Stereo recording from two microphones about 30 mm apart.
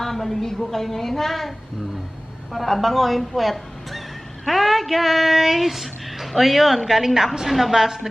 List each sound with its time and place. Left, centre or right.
0.0 s a woman's voice: centre
2.6 s a man's voice: centre